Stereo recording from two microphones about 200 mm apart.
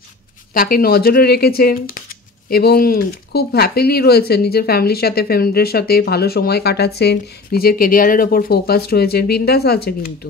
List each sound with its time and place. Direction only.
0.6 s speech: 45° left (ahead or behind)